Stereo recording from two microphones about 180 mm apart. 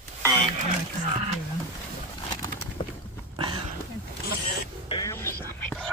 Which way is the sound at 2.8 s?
30° left (ahead or behind).